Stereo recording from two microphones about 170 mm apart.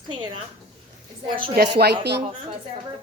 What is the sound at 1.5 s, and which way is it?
Speech, 70° right (ahead or behind).